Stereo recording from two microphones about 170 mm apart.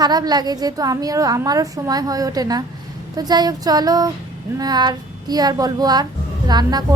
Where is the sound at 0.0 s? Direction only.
25° right (ahead or behind).